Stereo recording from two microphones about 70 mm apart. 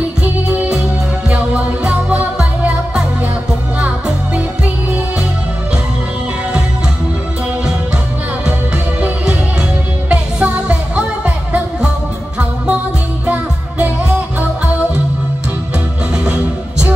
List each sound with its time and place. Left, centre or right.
0.2 s music: right
9.0 s music: centre
13.3 s music: centre